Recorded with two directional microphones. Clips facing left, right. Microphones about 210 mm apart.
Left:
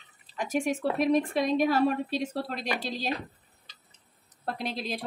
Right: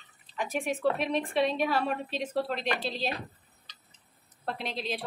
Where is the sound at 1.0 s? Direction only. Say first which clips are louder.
Left 3 dB; 45° left (ahead or behind).